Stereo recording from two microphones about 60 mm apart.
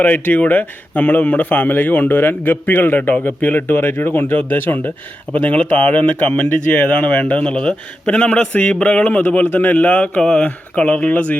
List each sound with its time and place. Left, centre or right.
0.0 s a man's voice: left
10.2 s speech: centre